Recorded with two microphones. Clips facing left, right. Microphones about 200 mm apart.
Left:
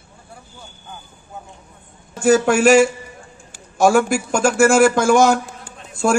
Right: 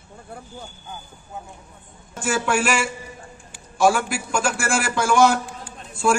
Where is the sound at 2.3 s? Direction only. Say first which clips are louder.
Left 9 dB; 40° left (ahead or behind).